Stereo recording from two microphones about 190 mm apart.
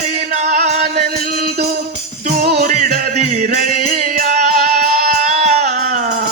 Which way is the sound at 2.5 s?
55° right (ahead or behind).